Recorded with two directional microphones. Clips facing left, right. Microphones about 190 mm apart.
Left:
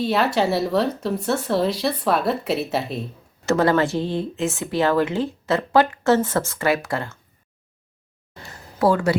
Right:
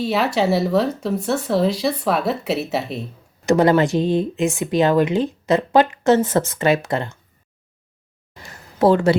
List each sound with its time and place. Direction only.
0.0 s speech: centre (ahead or behind)
3.4 s speech: 15° right (ahead or behind)
8.4 s a sound: 25° right (ahead or behind)